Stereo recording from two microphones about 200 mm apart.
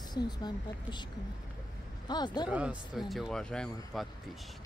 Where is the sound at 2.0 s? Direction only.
20° left (ahead or behind).